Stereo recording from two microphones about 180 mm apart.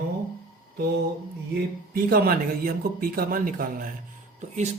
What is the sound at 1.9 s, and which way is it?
Speech, 55° right (ahead or behind).